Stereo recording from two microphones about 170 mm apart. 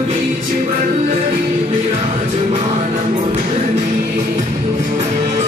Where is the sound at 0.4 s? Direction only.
50° right (ahead or behind).